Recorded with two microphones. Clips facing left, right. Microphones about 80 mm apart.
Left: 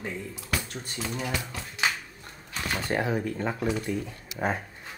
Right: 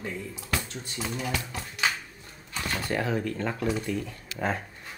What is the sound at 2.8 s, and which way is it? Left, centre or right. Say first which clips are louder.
Speech: left 1 dB; left.